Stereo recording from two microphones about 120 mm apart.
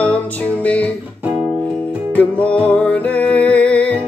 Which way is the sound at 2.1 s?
10° left (ahead or behind).